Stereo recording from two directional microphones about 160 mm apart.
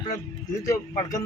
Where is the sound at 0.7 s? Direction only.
20° left (ahead or behind).